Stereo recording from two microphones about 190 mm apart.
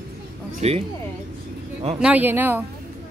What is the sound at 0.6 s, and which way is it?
Speech, 35° right (ahead or behind).